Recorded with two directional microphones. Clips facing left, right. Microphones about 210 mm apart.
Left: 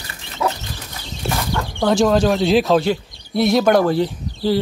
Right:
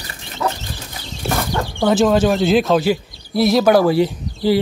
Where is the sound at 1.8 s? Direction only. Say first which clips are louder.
Right 1 dB; 5° right (ahead or behind).